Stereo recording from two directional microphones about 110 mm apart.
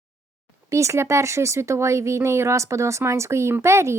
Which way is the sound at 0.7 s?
25° right (ahead or behind).